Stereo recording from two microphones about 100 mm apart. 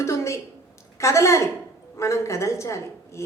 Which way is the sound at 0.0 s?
30° left (ahead or behind).